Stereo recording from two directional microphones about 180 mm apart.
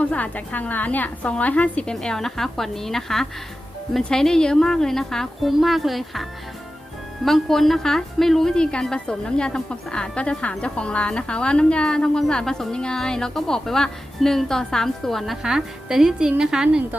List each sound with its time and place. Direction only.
0.0 s a woman's voice: 5° left (ahead or behind)
7.3 s a woman's voice: centre (ahead or behind)